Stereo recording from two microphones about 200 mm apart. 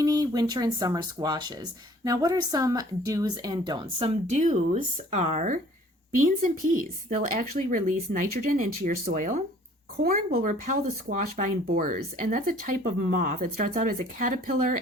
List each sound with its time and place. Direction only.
0.0 s speech: 20° right (ahead or behind); by 14.8 s 45° right (ahead or behind)